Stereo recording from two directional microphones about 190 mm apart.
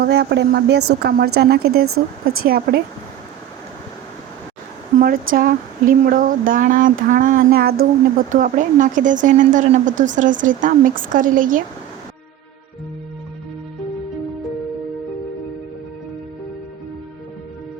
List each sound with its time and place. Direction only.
0.0 s a woman's voice: 65° right (ahead or behind)
4.9 s speech: 50° right (ahead or behind)